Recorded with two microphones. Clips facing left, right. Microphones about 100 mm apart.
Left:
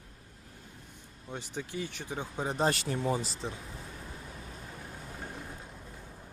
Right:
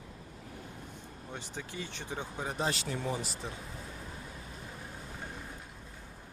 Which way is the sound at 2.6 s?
45° left (ahead or behind).